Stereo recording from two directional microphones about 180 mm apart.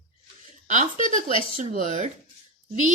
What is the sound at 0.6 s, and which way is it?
A woman's voice, 45° right (ahead or behind).